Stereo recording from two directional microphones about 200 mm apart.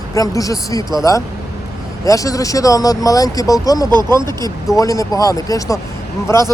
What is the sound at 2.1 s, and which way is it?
Speech, 15° left (ahead or behind).